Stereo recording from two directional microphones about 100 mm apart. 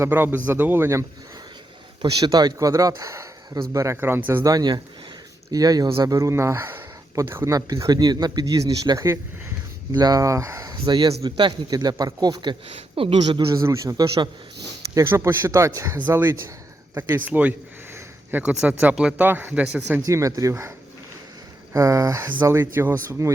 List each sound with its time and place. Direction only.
0.0 s a man's voice: 20° right (ahead or behind)
2.0 s speech: 45° right (ahead or behind); by 4.2 s 25° right (ahead or behind)
4.4 s speech: 45° right (ahead or behind)
10.7 s speech: 45° right (ahead or behind)
12.6 s speech: 75° right (ahead or behind)
13.2 s speech: 50° right (ahead or behind)
13.6 s a man's voice: 35° right (ahead or behind)
16.0 s a man's voice: 20° right (ahead or behind)
17.9 s a sound: 20° right (ahead or behind)
18.6 s speech: 15° right (ahead or behind)
20.1 s a man's voice: 35° right (ahead or behind)